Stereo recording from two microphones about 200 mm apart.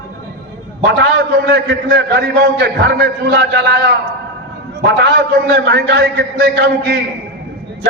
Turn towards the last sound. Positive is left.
turn(degrees=-55)  # may be behind; listen again after turning